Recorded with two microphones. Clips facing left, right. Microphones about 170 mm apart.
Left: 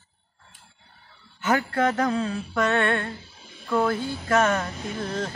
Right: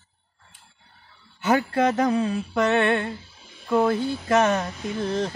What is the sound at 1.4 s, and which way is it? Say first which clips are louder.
Mantra: right 2 dB; 20° right (ahead or behind).